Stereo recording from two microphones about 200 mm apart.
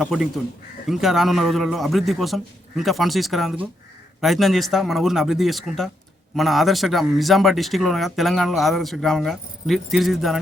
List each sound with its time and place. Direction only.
0.0 s speech: centre (ahead or behind)